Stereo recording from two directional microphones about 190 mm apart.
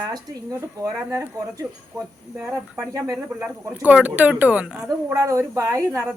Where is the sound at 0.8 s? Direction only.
15° right (ahead or behind).